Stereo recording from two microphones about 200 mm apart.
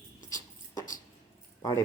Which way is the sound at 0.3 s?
20° left (ahead or behind).